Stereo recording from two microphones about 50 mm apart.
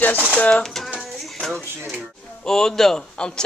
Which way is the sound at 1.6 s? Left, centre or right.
Right.